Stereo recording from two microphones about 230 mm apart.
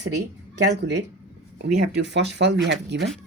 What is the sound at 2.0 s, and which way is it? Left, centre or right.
Speech, right.